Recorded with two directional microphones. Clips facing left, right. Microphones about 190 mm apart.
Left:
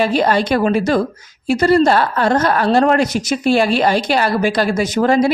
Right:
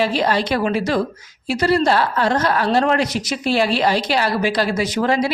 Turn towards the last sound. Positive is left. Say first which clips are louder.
# left 4 dB
turn(degrees=45)  # may be behind; listen again after turning